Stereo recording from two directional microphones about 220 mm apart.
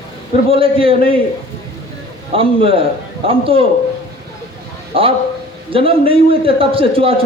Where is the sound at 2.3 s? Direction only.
25° right (ahead or behind).